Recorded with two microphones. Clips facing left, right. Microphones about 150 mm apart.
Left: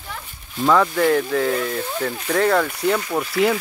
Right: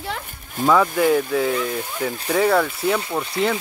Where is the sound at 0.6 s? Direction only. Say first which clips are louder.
Even; centre (ahead or behind).